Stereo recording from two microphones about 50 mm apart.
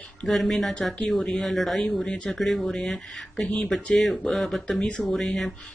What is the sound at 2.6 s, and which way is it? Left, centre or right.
Speech, centre.